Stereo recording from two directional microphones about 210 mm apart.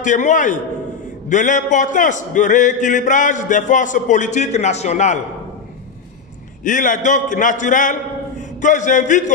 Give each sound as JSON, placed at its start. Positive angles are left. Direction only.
{"t": 0.0, "sound": "a man's voice", "side_deg": 35}
{"t": 6.6, "sound": "a man's voice", "side_deg": 40}